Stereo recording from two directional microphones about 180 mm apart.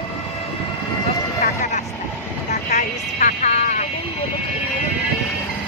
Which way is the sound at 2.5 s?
40° left (ahead or behind).